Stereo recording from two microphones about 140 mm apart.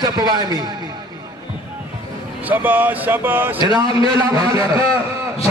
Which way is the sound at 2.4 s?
15° right (ahead or behind).